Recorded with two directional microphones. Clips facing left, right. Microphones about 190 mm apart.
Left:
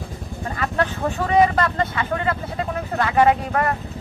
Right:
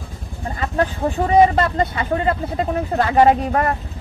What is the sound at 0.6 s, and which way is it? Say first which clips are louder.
Speech: right 3 dB; 25° right (ahead or behind).